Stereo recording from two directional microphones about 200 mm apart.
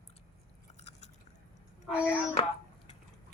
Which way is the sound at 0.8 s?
35° left (ahead or behind).